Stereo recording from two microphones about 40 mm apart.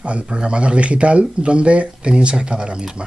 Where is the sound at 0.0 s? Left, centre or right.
Right.